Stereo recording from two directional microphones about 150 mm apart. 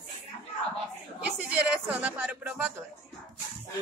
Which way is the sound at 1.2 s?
10° right (ahead or behind).